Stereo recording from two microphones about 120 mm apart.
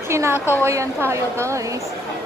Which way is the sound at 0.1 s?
20° right (ahead or behind).